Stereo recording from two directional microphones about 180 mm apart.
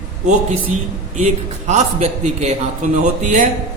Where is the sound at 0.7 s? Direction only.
40° right (ahead or behind).